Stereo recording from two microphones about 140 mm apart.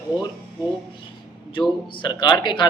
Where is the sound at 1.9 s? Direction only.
35° left (ahead or behind).